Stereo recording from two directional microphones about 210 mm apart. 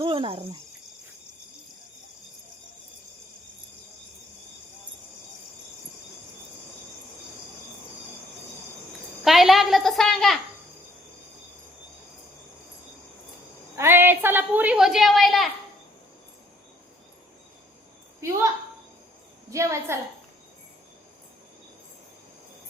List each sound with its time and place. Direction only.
0.0 s speech: 25° right (ahead or behind)
9.2 s a woman's voice: centre (ahead or behind)
13.7 s a woman's voice: 10° right (ahead or behind)
18.2 s a woman's voice: 15° right (ahead or behind)